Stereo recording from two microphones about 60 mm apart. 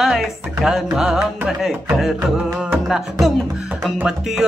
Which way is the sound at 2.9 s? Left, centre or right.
Centre.